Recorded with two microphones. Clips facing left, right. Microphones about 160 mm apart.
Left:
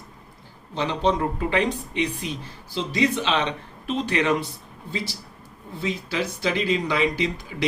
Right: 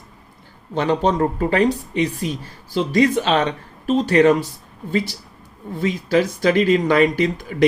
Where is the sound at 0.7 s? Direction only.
45° right (ahead or behind).